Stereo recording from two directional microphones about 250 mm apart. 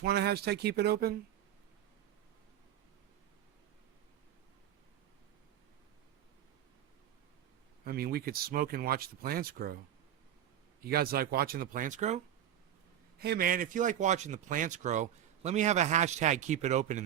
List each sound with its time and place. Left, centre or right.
0.0 s speech: right
7.9 s speech: right
10.8 s speech: right
13.1 s a man's voice: right